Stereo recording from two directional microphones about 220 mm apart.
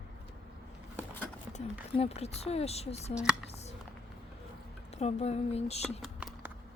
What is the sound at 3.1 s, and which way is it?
Speech, 5° right (ahead or behind).